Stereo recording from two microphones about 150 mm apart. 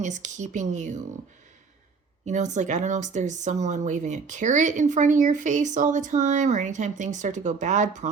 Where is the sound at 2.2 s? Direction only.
50° right (ahead or behind).